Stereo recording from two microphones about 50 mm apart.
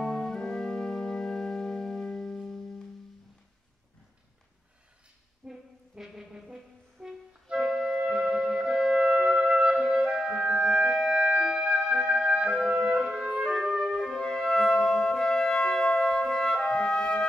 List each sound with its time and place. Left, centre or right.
0.0 s music: centre
5.5 s brass instrument: centre
7.5 s clarinet: centre
8.1 s music: centre
10.0 s clarinet: centre
10.7 s clarinet: centre
11.2 s music: centre
12.4 s clarinet: centre
13.0 s music: centre
13.8 s music: centre